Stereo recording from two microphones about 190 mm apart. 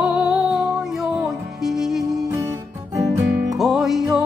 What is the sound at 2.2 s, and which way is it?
Music, 15° right (ahead or behind).